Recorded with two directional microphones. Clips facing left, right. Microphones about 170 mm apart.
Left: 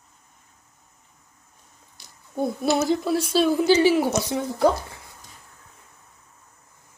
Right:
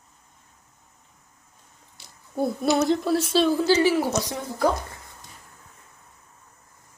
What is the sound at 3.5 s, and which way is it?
Speech, 20° left (ahead or behind).